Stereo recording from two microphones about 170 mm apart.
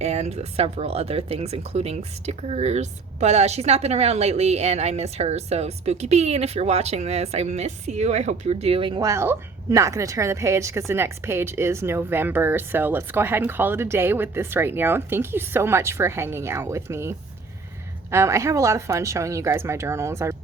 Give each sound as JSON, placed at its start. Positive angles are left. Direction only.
{"t": 0.0, "sound": "speech", "side_deg": -40}
{"t": 9.0, "sound": "a woman's voice", "side_deg": -15}